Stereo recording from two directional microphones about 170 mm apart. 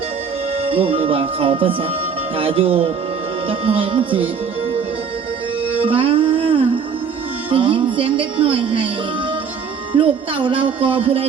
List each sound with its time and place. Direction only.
0.6 s speech: 35° right (ahead or behind)
5.8 s music: 30° right (ahead or behind)
7.5 s speech: 30° right (ahead or behind)
9.9 s speech: 30° right (ahead or behind)